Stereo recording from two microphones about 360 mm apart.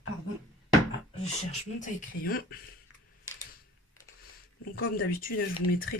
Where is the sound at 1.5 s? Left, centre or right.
Left.